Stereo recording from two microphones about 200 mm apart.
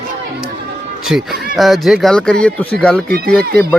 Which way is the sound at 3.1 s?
50° right (ahead or behind).